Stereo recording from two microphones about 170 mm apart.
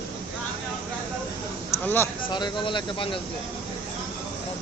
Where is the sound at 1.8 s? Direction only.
10° left (ahead or behind).